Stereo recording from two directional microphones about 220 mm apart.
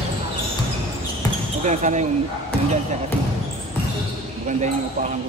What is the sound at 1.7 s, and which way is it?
Speech, 35° right (ahead or behind).